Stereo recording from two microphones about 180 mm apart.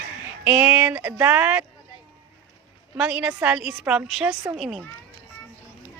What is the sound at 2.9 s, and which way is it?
A woman's voice, 5° right (ahead or behind).